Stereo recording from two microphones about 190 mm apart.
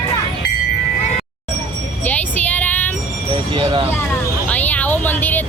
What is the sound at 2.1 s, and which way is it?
Music, 10° left (ahead or behind).